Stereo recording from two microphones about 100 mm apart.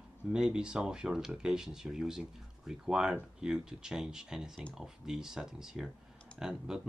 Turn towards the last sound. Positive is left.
turn(degrees=-5)  # may be behind; listen again after turning